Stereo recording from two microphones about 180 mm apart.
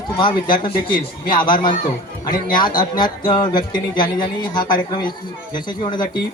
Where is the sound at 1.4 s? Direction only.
25° left (ahead or behind).